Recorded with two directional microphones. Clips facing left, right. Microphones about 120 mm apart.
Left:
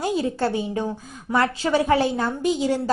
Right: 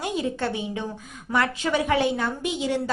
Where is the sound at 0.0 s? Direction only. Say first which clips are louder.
Left 4 dB; 35° left (ahead or behind).